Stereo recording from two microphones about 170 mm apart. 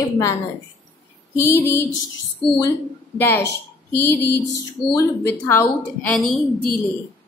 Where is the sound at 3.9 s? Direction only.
15° left (ahead or behind).